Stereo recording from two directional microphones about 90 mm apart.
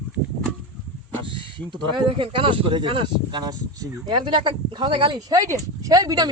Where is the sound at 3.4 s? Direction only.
45° right (ahead or behind); by 5.2 s 65° right (ahead or behind).